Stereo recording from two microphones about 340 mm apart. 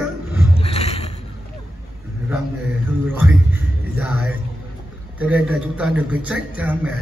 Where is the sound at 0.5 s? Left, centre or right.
Centre.